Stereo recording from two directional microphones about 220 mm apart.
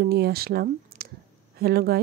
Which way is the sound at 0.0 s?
45° right (ahead or behind).